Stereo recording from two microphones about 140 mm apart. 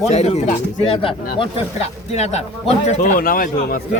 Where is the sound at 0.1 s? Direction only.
50° left (ahead or behind).